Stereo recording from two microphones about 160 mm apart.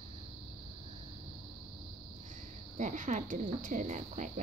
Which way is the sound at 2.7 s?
50° right (ahead or behind).